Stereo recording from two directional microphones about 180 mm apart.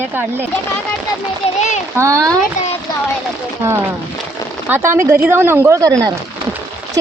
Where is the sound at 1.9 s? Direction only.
15° right (ahead or behind).